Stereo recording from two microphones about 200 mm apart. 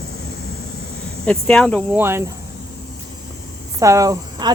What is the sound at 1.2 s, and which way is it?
Speech, 5° left (ahead or behind).